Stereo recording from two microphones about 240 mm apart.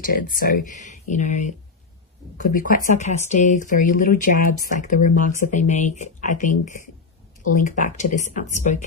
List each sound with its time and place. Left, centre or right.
0.0 s speech: left